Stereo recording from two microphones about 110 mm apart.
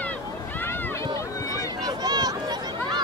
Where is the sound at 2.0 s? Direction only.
35° right (ahead or behind).